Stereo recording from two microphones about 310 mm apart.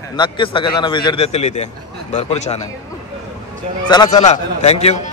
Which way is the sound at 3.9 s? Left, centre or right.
Centre.